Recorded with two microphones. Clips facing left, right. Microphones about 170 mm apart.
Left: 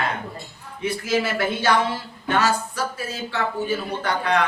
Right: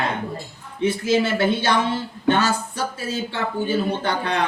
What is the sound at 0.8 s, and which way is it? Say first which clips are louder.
A man's voice: right 4 dB; 25° right (ahead or behind).